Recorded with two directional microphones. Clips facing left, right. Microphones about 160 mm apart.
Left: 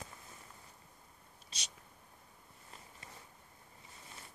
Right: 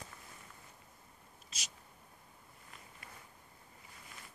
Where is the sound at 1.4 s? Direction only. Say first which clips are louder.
Even; 30° left (ahead or behind).